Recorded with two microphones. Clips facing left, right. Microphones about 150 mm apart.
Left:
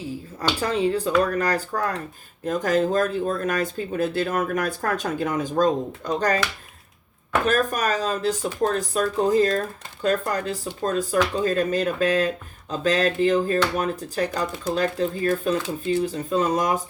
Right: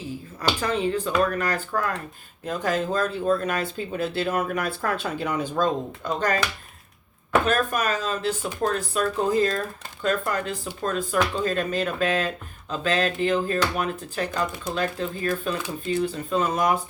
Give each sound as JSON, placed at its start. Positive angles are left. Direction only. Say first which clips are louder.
{"t": 0.6, "sound": "speech", "louder": "left 4 dB", "side_deg": 35}
{"t": 7.4, "sound": "speech", "louder": "left 2 dB", "side_deg": 40}